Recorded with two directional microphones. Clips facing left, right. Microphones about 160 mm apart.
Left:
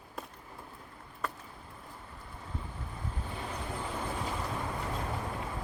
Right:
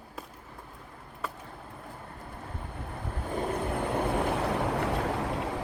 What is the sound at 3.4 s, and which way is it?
Vehicle, 55° right (ahead or behind).